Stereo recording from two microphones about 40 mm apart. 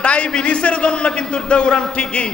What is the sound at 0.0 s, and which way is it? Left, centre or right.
A man's voice, left.